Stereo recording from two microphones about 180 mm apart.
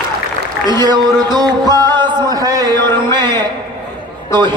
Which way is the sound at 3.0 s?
25° right (ahead or behind).